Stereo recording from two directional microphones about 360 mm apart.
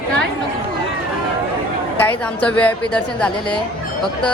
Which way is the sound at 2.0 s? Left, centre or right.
Centre.